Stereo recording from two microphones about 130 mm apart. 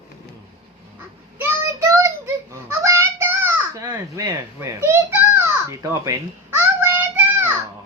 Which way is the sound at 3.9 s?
25° right (ahead or behind).